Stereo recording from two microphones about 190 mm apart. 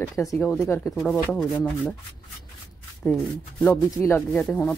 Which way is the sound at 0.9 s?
5° left (ahead or behind).